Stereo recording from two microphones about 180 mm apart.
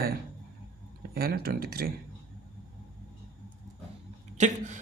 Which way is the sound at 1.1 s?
55° right (ahead or behind).